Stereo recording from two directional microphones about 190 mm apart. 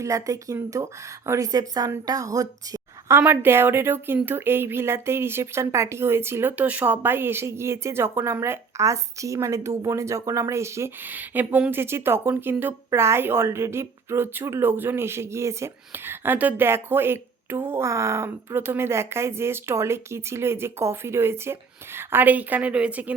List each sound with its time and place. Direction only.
0.0 s a woman's voice: 15° right (ahead or behind)